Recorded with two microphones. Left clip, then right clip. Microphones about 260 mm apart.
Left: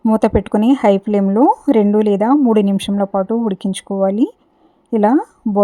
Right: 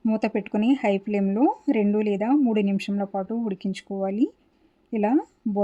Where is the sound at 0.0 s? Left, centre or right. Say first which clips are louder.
Left 11 dB; left.